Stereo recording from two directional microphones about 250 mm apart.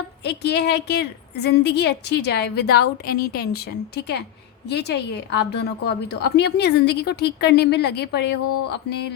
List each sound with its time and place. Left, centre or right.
0.3 s a woman's voice: left